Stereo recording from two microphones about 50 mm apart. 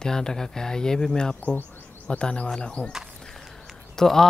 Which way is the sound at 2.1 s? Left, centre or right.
Left.